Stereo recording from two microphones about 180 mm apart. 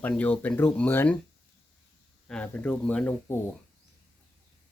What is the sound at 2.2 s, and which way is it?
Speech, 5° left (ahead or behind).